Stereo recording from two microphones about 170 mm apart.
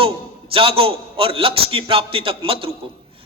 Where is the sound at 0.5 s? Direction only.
35° right (ahead or behind).